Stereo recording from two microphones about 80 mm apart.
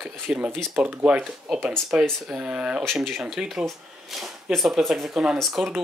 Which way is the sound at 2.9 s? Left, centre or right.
Centre.